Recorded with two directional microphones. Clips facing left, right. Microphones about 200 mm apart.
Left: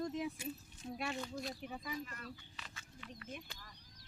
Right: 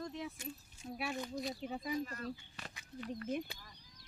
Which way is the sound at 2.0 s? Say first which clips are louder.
Right 7 dB; 40° right (ahead or behind).